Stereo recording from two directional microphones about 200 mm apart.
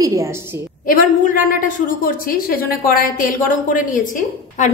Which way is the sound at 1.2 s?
40° left (ahead or behind).